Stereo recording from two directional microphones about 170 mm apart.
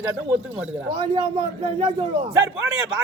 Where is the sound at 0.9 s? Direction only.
35° right (ahead or behind).